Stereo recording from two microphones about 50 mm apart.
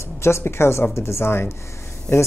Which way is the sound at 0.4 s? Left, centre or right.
Left.